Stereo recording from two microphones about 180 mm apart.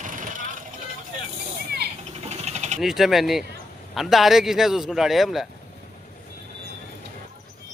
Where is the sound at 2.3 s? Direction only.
40° right (ahead or behind).